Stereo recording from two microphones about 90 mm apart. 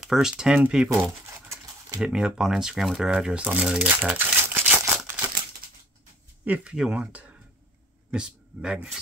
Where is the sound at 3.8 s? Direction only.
20° right (ahead or behind).